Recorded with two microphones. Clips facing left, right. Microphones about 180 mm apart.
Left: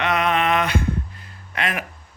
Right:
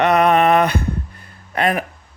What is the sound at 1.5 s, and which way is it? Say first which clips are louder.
Speech: right 8 dB; 40° right (ahead or behind).